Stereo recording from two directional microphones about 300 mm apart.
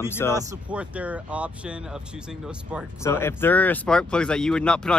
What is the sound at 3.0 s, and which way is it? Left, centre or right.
Speech, centre.